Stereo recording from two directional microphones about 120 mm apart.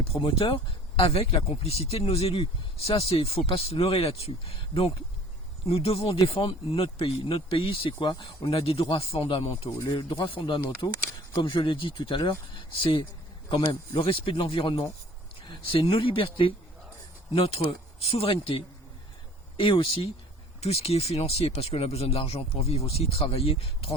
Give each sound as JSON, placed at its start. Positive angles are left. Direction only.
{"t": 0.0, "sound": "speech", "side_deg": 50}
{"t": 10.8, "sound": "speech", "side_deg": 35}